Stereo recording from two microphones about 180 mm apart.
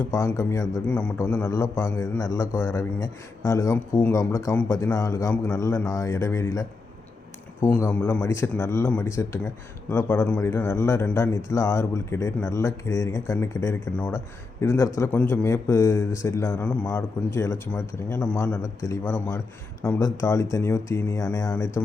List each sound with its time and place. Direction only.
0.0 s a man's voice: 15° left (ahead or behind)